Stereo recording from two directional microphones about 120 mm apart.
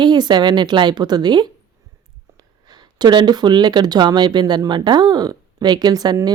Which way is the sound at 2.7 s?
35° right (ahead or behind).